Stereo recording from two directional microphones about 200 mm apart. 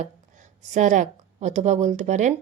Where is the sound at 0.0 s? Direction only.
40° right (ahead or behind).